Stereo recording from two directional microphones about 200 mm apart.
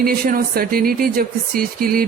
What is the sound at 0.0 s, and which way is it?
Speech, 50° right (ahead or behind).